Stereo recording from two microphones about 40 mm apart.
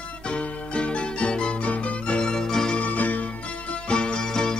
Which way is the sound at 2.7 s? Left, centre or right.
Left.